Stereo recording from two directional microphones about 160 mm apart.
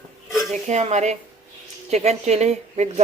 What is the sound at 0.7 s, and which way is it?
A man's voice, 45° right (ahead or behind).